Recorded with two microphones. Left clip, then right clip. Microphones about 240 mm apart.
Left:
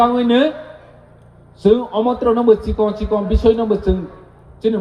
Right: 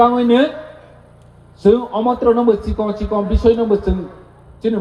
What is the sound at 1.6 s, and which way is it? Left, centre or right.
A man's voice, left.